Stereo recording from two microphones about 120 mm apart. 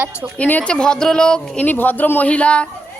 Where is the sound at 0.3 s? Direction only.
10° left (ahead or behind).